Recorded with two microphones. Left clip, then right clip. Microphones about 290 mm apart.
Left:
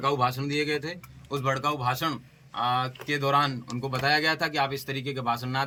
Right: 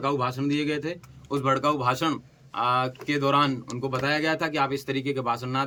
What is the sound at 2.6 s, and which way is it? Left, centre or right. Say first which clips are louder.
A man's voice: right 2 dB; centre.